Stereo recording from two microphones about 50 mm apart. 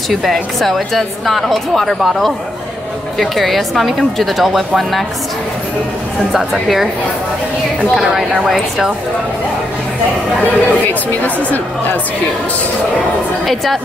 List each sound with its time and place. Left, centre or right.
0.1 s a woman's voice: centre
6.3 s a woman's voice: centre
7.9 s a woman's voice: centre
10.4 s speech: left